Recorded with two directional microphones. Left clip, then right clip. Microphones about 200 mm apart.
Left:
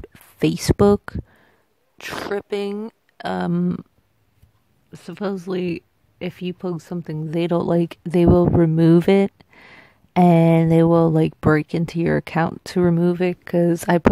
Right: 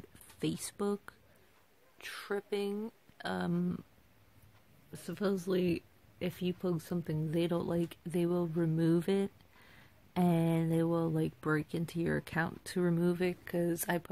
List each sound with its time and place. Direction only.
0.1 s speech: 45° left (ahead or behind)
4.9 s speech: 45° left (ahead or behind)